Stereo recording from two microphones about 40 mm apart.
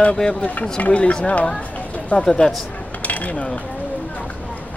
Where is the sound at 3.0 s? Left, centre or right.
Left.